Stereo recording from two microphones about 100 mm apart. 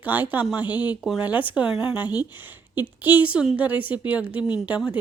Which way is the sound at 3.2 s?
10° right (ahead or behind).